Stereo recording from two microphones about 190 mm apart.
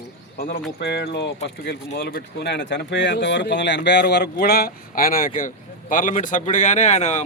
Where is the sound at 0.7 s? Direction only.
65° left (ahead or behind).